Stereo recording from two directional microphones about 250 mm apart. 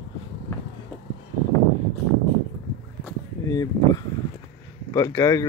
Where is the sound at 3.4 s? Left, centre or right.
Centre.